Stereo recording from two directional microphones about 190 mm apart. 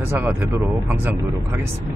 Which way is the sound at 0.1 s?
10° right (ahead or behind).